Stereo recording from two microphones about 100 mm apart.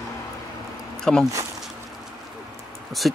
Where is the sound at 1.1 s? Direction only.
10° left (ahead or behind).